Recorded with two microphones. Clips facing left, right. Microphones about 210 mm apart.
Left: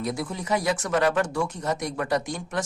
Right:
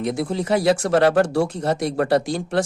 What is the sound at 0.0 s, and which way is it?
Speech, 25° right (ahead or behind).